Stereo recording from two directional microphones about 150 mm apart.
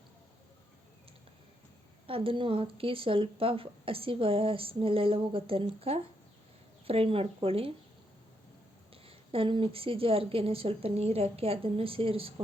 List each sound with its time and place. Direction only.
2.0 s speech: 35° right (ahead or behind)
9.0 s speech: 35° right (ahead or behind)